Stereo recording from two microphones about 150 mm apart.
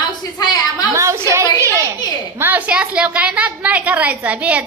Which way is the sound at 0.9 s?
20° right (ahead or behind).